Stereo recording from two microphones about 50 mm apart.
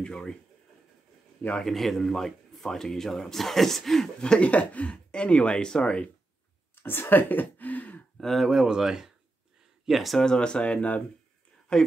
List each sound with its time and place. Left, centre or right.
0.0 s speech: centre
1.6 s speech: centre
4.2 s speech: left
6.7 s speech: left
8.2 s speech: centre
10.2 s speech: centre